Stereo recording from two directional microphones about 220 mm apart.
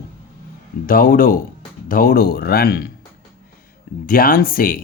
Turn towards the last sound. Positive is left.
turn(degrees=40)  # may be behind; listen again after turning